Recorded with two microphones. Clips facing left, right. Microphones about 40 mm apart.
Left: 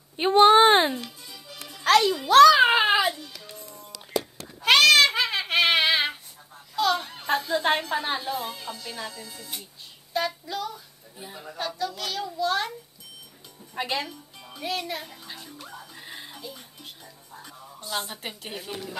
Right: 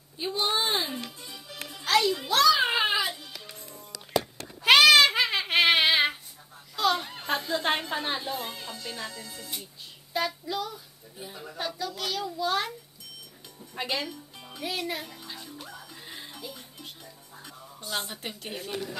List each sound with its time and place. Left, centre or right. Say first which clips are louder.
0.2 s speech: left 13 dB; left
1.2 s music: right 1 dB; centre
2.2 s a sound: left 8 dB; left
2.8 s music: left 5 dB; left
3.5 s music: left 3 dB; centre
4.6 s a sound: even; centre
7.9 s a woman's voice: left 3 dB; centre
11.5 s speech: left 3 dB; centre
13.7 s speech: left 2 dB; centre
15.2 s music: even; centre
17.8 s speech: left 2 dB; centre